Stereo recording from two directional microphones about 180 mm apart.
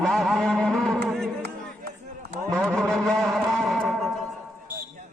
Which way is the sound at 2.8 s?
5° left (ahead or behind).